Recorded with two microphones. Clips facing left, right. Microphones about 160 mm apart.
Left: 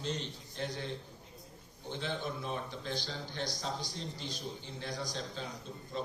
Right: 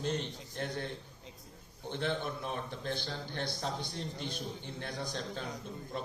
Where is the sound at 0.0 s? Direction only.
55° right (ahead or behind).